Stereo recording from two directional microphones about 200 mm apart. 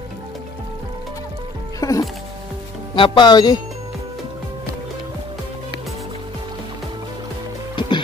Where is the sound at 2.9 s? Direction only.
25° left (ahead or behind).